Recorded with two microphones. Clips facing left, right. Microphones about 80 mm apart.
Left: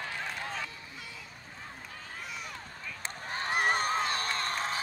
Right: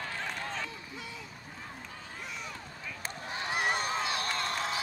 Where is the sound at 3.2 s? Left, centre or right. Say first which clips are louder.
Left 2 dB; left.